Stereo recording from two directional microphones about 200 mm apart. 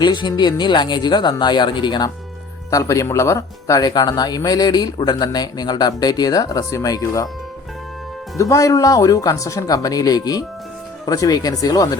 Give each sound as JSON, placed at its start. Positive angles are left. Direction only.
{"t": 0.0, "sound": "speech", "side_deg": 20}
{"t": 8.4, "sound": "speech", "side_deg": 15}